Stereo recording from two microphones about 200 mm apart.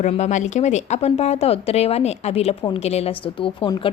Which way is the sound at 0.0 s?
35° left (ahead or behind).